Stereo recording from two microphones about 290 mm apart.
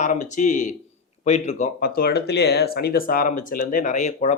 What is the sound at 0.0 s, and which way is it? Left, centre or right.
A man's voice, left.